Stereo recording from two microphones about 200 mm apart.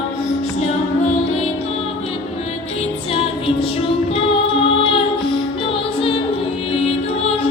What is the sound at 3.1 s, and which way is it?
Music, 30° left (ahead or behind).